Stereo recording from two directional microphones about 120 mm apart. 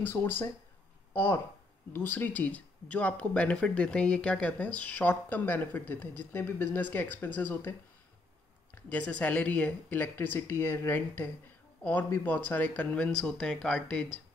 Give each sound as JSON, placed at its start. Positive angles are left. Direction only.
{"t": 0.0, "sound": "speech", "side_deg": 15}
{"t": 8.7, "sound": "speech", "side_deg": 10}